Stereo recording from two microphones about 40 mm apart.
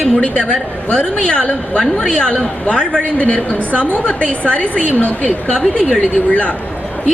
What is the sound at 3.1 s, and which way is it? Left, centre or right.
Speech, left.